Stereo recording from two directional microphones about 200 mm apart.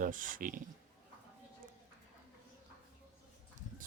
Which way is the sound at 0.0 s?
40° right (ahead or behind).